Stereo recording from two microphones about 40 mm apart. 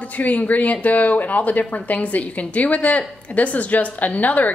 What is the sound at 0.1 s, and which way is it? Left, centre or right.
A woman's voice, left.